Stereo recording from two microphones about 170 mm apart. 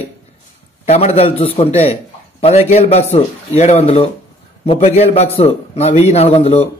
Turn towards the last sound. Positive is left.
turn(degrees=35)  # may be behind; listen again after turning